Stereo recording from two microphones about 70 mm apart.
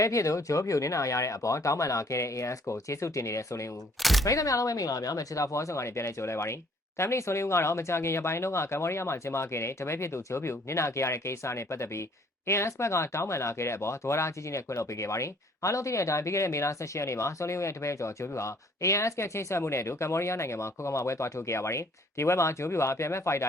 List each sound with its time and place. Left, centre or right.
0.0 s speech: left
4.0 s a sound: centre
4.3 s speech: left